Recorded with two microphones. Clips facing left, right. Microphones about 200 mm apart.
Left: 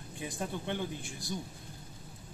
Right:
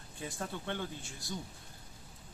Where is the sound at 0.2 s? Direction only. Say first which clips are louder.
Left 3 dB; 15° left (ahead or behind).